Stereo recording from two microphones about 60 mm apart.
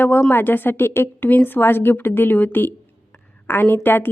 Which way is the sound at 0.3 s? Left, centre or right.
Left.